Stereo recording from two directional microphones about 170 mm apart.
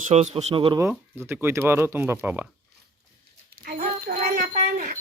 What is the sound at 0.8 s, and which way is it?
Speech, 15° right (ahead or behind).